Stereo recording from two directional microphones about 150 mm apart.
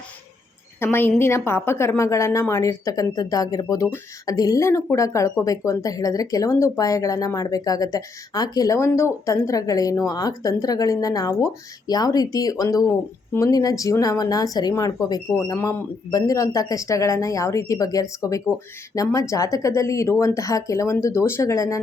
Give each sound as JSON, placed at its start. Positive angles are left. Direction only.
{"t": 0.8, "sound": "a woman's voice", "side_deg": 15}